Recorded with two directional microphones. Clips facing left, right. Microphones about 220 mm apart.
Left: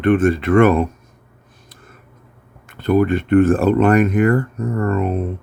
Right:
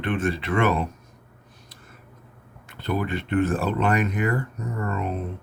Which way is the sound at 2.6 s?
50° left (ahead or behind).